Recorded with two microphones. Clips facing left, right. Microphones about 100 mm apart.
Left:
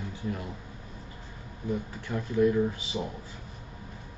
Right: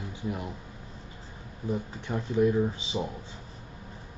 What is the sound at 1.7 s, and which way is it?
Speech, 20° right (ahead or behind).